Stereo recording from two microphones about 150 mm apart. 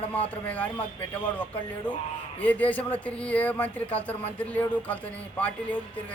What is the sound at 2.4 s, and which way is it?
Speech, 10° left (ahead or behind).